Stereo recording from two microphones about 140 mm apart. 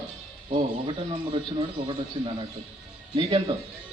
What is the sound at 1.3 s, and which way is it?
A man's voice, 35° right (ahead or behind).